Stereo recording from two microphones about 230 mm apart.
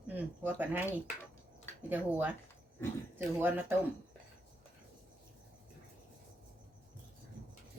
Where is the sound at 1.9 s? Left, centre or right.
Centre.